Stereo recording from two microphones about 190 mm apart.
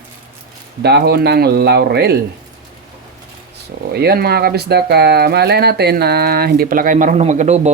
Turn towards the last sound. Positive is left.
turn(degrees=-35)  # may be behind; listen again after turning